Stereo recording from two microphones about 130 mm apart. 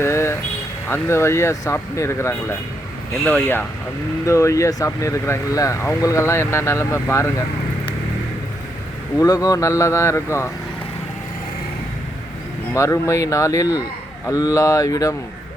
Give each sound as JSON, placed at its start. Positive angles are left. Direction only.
{"t": 0.0, "sound": "vehicle", "side_deg": 20}
{"t": 0.9, "sound": "speech", "side_deg": 20}
{"t": 9.1, "sound": "speech", "side_deg": 30}
{"t": 12.7, "sound": "speech", "side_deg": 20}